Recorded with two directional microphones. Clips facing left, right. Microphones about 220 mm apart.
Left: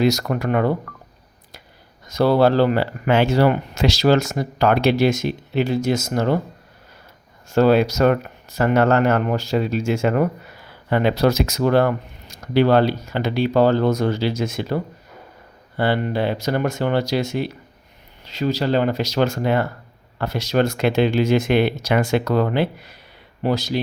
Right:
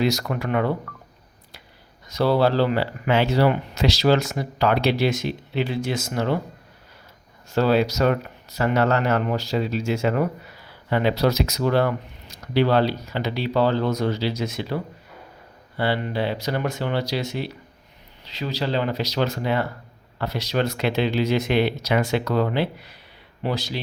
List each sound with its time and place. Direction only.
0.0 s speech: 45° left (ahead or behind)
2.0 s speech: 50° left (ahead or behind)
7.5 s speech: 50° left (ahead or behind)
15.8 s speech: 50° left (ahead or behind)